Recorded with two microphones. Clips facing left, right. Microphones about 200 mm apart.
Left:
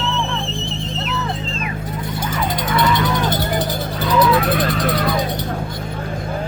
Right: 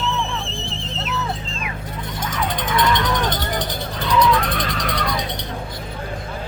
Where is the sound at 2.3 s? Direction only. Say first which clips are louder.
Left 1 dB; 10° left (ahead or behind).